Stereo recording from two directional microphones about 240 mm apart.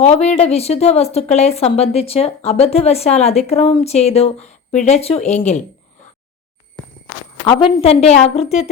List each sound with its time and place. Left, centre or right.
0.0 s speech: left
7.4 s speech: left